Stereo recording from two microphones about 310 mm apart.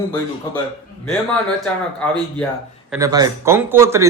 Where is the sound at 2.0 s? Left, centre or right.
Centre.